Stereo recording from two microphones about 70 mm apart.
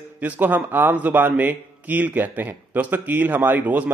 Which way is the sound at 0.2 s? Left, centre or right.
Right.